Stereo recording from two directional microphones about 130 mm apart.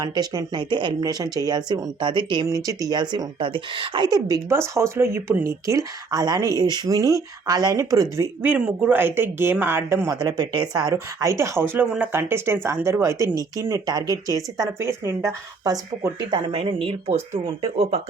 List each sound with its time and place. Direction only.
0.0 s speech: 30° right (ahead or behind)
8.4 s speech: 15° right (ahead or behind)
10.2 s speech: 30° right (ahead or behind)
16.5 s speech: 45° right (ahead or behind)